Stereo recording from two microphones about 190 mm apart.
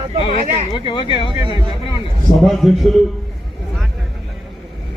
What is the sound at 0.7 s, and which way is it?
Speech, 25° left (ahead or behind).